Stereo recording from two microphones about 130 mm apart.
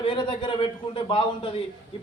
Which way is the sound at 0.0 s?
40° left (ahead or behind).